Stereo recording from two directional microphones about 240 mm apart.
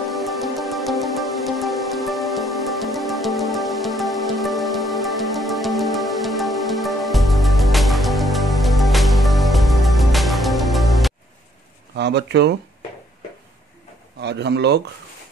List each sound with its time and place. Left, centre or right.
0.1 s music: centre
12.0 s speech: right
14.2 s a man's voice: right